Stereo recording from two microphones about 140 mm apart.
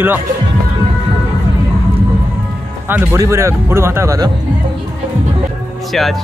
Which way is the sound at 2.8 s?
15° right (ahead or behind).